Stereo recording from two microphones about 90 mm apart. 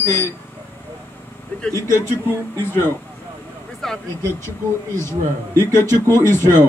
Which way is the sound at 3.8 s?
5° left (ahead or behind).